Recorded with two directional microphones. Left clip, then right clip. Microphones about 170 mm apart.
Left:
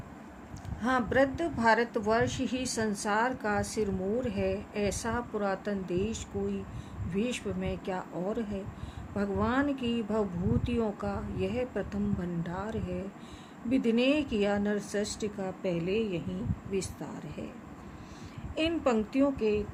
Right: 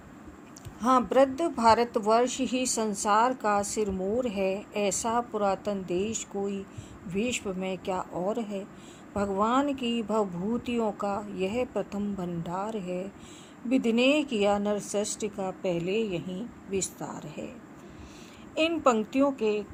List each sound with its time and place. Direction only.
0.8 s speech: 30° right (ahead or behind)
15.6 s a woman's voice: 15° left (ahead or behind)
16.0 s speech: 25° right (ahead or behind)
18.5 s speech: 25° right (ahead or behind)
19.4 s a woman's voice: 15° left (ahead or behind)